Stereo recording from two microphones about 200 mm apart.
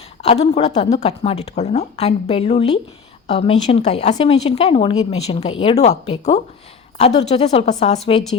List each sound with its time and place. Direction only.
0.2 s speech: 30° left (ahead or behind)